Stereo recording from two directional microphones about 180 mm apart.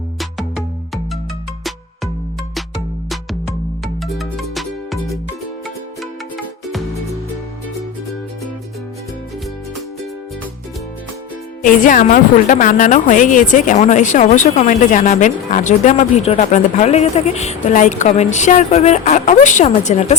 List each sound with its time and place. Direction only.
0.2 s music: centre (ahead or behind)
4.0 s music: centre (ahead or behind)
11.6 s a woman's voice: 50° left (ahead or behind)